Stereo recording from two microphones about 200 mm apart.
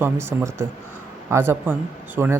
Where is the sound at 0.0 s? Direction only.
10° right (ahead or behind).